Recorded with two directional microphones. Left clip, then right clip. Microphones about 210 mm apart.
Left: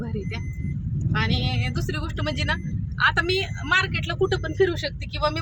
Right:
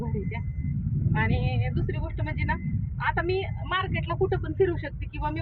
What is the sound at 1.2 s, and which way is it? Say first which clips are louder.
Speech: left 3 dB; 15° left (ahead or behind).